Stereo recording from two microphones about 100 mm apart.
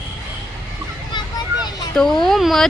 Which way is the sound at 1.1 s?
45° left (ahead or behind).